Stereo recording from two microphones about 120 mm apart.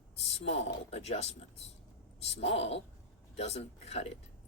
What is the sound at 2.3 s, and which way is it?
Speech, 60° left (ahead or behind).